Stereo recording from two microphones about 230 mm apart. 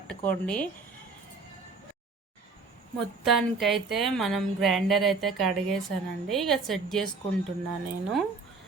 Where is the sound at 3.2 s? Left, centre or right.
Centre.